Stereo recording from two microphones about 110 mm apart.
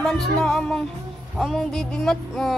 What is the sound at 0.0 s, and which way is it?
Speech, 5° left (ahead or behind).